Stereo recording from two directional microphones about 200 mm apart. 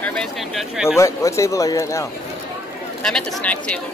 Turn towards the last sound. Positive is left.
turn(degrees=5)  # may be behind; listen again after turning